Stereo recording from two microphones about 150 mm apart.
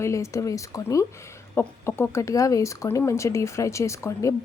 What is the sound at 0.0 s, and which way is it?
Speech, 20° left (ahead or behind).